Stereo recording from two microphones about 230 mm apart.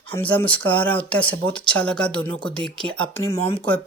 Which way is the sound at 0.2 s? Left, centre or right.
Centre.